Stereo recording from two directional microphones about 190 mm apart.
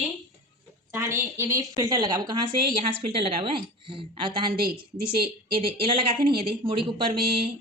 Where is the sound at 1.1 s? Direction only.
15° right (ahead or behind).